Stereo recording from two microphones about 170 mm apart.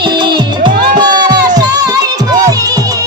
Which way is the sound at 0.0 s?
30° right (ahead or behind).